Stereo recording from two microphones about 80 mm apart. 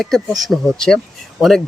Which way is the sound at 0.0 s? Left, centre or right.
Centre.